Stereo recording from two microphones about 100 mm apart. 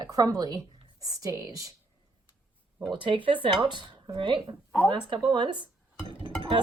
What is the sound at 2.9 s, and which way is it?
Speech, 55° right (ahead or behind).